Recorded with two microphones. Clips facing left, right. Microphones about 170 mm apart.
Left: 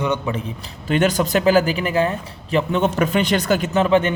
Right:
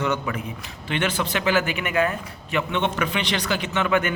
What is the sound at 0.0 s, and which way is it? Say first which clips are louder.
A man's voice: left 3 dB; 20° left (ahead or behind).